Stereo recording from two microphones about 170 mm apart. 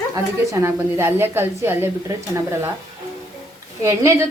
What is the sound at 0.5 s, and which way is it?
A woman's voice, 15° right (ahead or behind).